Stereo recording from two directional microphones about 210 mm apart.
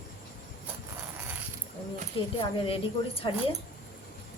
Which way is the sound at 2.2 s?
25° left (ahead or behind).